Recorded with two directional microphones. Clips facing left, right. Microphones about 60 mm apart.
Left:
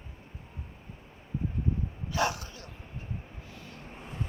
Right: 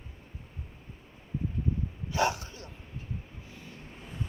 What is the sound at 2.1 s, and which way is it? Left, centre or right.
Bow-wow, right.